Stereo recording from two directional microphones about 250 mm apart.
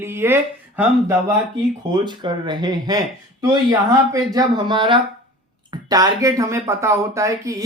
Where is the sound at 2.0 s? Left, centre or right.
Centre.